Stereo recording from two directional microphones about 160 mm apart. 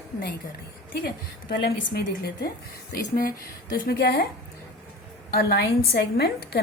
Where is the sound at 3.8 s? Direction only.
90° left.